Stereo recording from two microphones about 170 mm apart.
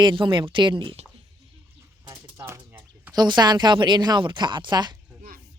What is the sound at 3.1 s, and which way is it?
Speech, 25° right (ahead or behind).